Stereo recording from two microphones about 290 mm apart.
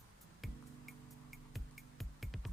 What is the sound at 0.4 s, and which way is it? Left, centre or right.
Music, centre.